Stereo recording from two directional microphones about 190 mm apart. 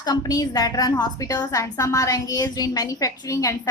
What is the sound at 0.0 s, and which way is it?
A woman's voice, 20° left (ahead or behind).